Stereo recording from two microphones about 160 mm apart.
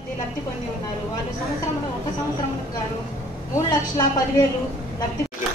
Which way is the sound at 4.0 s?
25° left (ahead or behind).